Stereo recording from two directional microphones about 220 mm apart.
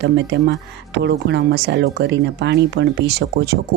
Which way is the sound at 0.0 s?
50° right (ahead or behind).